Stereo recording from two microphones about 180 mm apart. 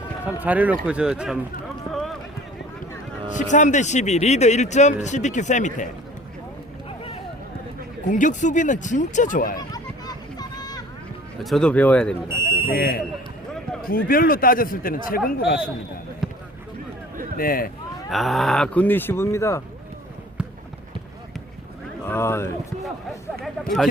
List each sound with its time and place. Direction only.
0.3 s speech: 10° right (ahead or behind)
1.9 s run: centre (ahead or behind)
3.2 s speech: 45° left (ahead or behind)
8.0 s speech: 45° left (ahead or behind)
9.6 s a sound: 20° left (ahead or behind)
11.4 s speech: 5° left (ahead or behind)
12.3 s speech: 15° right (ahead or behind)
12.7 s speech: 55° left (ahead or behind)
16.2 s a sound: centre (ahead or behind)
17.3 s speech: 55° left (ahead or behind)
18.1 s speech: centre (ahead or behind)
22.0 s speech: 10° left (ahead or behind)